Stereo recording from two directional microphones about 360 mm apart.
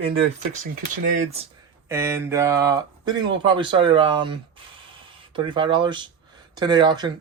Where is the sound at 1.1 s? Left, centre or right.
Centre.